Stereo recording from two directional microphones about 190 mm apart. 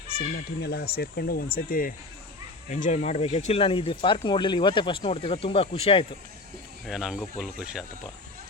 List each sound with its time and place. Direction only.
0.6 s speech: 55° left (ahead or behind); by 6.1 s 30° left (ahead or behind)
6.8 s speech: centre (ahead or behind)